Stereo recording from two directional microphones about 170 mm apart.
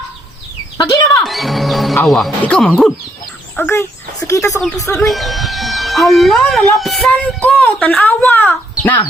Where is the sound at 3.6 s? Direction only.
15° left (ahead or behind).